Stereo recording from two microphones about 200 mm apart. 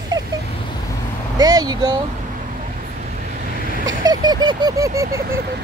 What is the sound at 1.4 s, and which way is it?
Speech, 20° right (ahead or behind).